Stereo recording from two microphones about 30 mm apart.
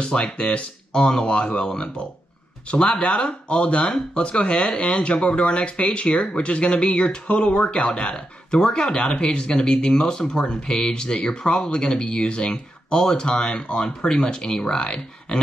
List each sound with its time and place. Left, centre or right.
0.2 s speech: left
2.7 s speech: left
6.4 s speech: left
8.9 s speech: left